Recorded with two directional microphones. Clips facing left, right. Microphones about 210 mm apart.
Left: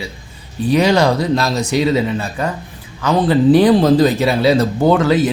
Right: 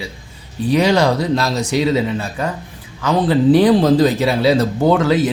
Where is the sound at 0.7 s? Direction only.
50° left (ahead or behind).